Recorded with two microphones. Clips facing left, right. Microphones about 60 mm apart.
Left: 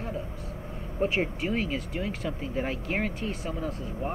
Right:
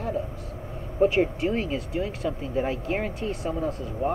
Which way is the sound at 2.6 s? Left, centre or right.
Centre.